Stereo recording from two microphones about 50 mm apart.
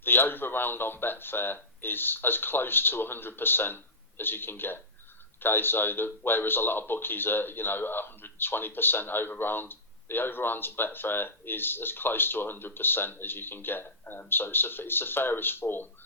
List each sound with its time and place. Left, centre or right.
0.0 s speech: left